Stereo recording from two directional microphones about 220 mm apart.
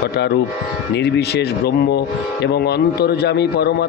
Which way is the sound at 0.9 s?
50° left (ahead or behind).